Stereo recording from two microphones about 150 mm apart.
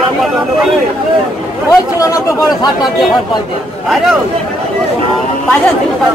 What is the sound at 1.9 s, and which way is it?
Speech, 20° left (ahead or behind).